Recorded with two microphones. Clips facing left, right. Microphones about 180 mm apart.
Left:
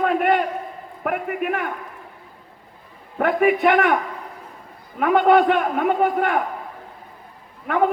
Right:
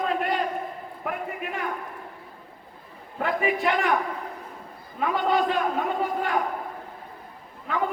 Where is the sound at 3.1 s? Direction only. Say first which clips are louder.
Left 7 dB; 60° left (ahead or behind).